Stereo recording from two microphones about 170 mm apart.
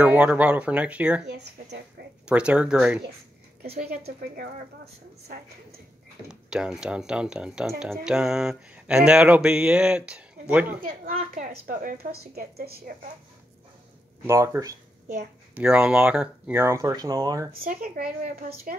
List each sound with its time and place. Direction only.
0.0 s speech: 10° right (ahead or behind)
1.2 s speech: 80° right
2.2 s speech: 5° right (ahead or behind)
6.5 s speech: 5° right (ahead or behind)
10.8 s speech: 55° right (ahead or behind)
14.2 s speech: 15° right (ahead or behind)
15.5 s speech: 10° right (ahead or behind)
17.6 s speech: 60° right (ahead or behind)